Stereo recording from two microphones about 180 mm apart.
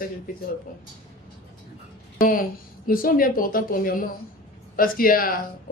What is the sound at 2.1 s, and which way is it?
A man's voice, 50° left (ahead or behind).